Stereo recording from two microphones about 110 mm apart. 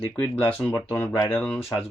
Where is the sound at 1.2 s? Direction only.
10° left (ahead or behind).